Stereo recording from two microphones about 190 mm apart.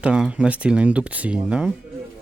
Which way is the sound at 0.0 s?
5° right (ahead or behind).